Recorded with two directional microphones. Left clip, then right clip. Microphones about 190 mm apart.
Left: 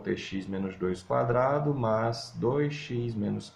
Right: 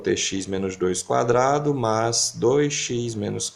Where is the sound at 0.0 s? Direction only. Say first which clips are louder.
Right 10 dB; 45° right (ahead or behind).